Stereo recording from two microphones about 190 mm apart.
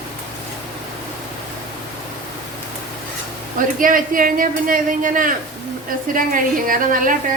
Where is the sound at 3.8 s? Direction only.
45° right (ahead or behind).